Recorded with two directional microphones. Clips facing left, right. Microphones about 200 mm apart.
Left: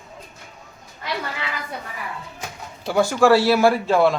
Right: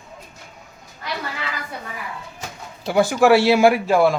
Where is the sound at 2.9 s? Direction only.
5° right (ahead or behind).